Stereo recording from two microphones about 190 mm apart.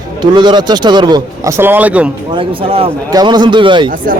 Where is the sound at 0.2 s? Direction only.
25° right (ahead or behind); by 2.0 s 5° right (ahead or behind).